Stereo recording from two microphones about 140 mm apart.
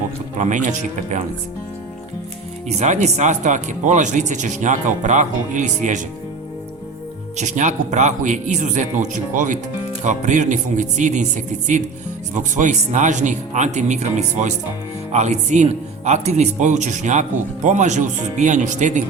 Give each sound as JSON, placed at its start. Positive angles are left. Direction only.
{"t": 0.3, "sound": "speech", "side_deg": -60}
{"t": 2.6, "sound": "speech", "side_deg": -55}
{"t": 7.3, "sound": "speech", "side_deg": -60}
{"t": 12.4, "sound": "speech", "side_deg": -60}